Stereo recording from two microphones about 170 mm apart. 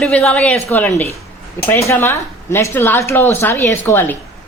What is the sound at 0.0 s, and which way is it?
Speech, 5° left (ahead or behind).